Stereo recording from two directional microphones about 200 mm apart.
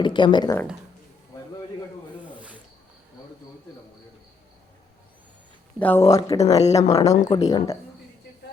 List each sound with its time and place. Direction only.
0.0 s speech: 25° left (ahead or behind)
2.2 s rub: 5° right (ahead or behind)
5.8 s speech: 10° left (ahead or behind)
7.0 s speech: 35° left (ahead or behind)
7.4 s speech: 15° left (ahead or behind)